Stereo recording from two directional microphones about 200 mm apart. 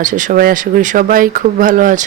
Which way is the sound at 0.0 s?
40° right (ahead or behind).